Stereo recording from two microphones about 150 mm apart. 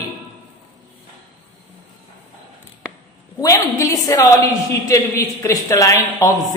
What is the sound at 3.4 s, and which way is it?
A man's voice, 25° left (ahead or behind).